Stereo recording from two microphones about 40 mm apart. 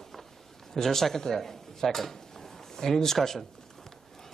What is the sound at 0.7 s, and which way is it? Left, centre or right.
Speech, centre.